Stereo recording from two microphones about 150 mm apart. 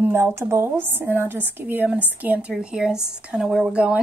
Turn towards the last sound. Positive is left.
turn(degrees=-10)  # may be behind; listen again after turning